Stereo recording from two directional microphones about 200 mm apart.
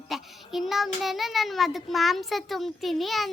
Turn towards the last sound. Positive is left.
turn(degrees=0)  # may be behind; listen again after turning